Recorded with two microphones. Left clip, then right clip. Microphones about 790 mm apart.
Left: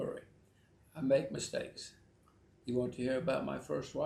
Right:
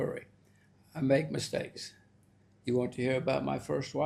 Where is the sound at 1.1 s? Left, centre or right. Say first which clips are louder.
Right 2 dB; right.